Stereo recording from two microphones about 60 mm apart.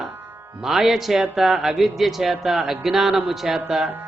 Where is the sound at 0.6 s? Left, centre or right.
Centre.